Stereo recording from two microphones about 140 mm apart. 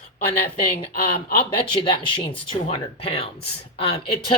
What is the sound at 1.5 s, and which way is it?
Speech, 40° left (ahead or behind).